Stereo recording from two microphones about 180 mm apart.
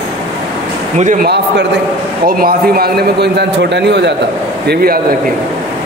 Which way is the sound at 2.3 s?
55° right (ahead or behind).